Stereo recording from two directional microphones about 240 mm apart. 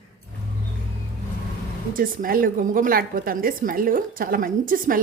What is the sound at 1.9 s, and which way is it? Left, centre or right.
A woman's voice, right.